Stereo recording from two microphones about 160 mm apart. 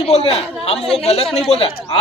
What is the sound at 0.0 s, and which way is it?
A man's voice, 40° left (ahead or behind).